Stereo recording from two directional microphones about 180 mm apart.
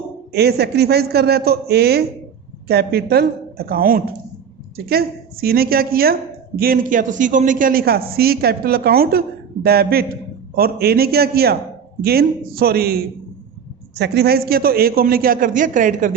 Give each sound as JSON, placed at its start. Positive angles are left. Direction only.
{"t": 0.3, "sound": "a man's voice", "side_deg": -65}